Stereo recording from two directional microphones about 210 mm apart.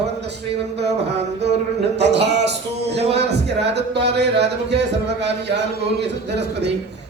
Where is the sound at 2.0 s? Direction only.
55° right (ahead or behind).